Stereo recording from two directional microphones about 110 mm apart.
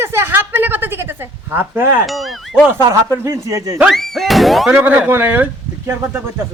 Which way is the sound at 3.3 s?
30° right (ahead or behind).